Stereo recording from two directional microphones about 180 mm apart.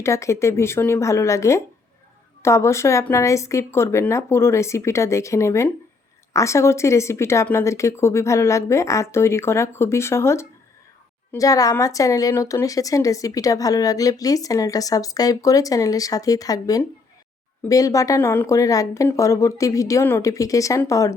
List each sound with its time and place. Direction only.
0.0 s speech: 15° left (ahead or behind)